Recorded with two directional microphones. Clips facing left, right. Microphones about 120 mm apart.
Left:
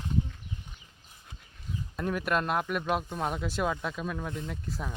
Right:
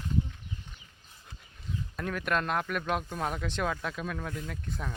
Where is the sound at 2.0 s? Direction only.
10° left (ahead or behind).